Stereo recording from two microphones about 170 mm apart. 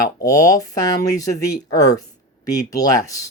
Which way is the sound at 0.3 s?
20° left (ahead or behind).